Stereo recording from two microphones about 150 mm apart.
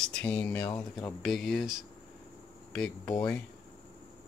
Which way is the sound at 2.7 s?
5° left (ahead or behind).